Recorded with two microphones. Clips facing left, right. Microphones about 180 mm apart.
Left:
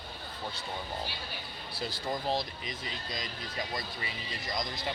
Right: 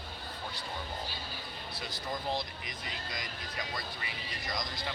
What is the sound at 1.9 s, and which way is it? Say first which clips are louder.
Speech: left 3 dB; 25° left (ahead or behind).